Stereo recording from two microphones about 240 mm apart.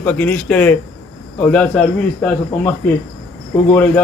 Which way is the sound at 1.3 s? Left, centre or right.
Centre.